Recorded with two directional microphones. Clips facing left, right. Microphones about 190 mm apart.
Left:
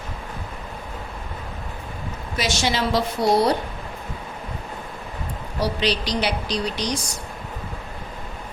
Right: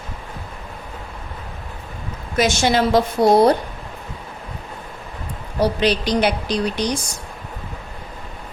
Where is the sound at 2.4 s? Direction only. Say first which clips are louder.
Right 6 dB; 50° right (ahead or behind).